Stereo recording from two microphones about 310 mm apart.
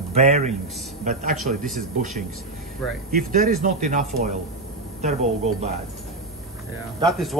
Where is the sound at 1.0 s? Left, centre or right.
Right.